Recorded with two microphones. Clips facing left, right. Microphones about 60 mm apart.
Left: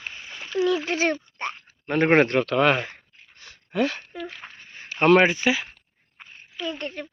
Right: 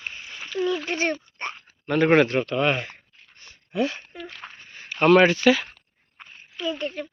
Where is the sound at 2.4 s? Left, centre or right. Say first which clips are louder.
Left 3 dB; left.